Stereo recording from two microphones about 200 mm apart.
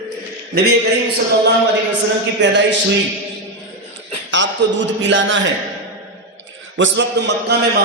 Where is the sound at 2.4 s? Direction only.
65° right (ahead or behind).